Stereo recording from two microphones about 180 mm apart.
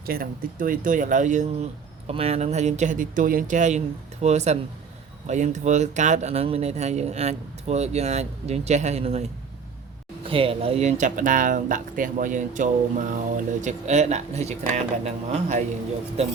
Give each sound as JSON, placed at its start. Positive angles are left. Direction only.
{"t": 0.0, "sound": "speech", "side_deg": -55}